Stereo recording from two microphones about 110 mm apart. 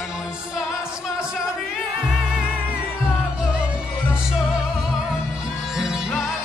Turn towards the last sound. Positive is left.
turn(degrees=-5)  # may be behind; listen again after turning